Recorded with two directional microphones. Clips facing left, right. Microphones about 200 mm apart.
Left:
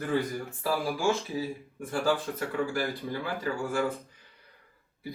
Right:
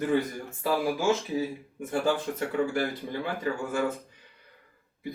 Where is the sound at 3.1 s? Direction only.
20° right (ahead or behind).